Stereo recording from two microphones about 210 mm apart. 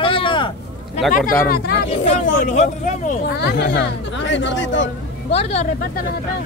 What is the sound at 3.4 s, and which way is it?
Speech, 50° left (ahead or behind).